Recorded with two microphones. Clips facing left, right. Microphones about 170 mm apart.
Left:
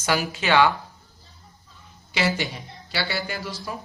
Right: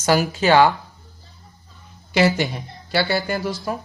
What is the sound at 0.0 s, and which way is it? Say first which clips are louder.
Speech: right 7 dB; 40° right (ahead or behind).